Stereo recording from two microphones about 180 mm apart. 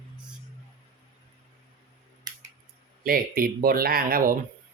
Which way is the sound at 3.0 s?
55° right (ahead or behind).